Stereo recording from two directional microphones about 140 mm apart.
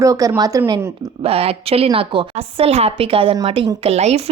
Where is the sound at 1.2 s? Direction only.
45° right (ahead or behind).